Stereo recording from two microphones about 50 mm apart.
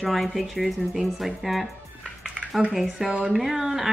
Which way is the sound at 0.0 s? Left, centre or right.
Centre.